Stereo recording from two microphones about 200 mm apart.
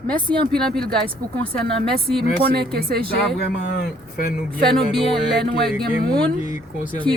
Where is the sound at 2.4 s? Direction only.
50° right (ahead or behind).